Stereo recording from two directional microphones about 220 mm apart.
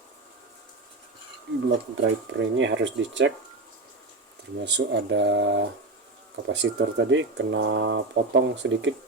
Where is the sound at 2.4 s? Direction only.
55° right (ahead or behind).